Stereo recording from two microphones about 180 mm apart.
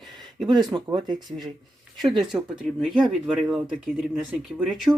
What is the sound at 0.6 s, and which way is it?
Speech, 25° right (ahead or behind).